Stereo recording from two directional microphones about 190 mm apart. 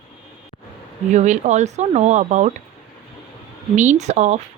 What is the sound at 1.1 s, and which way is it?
A woman's voice, 40° right (ahead or behind).